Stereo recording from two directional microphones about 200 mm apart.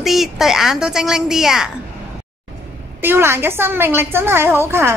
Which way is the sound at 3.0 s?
10° right (ahead or behind).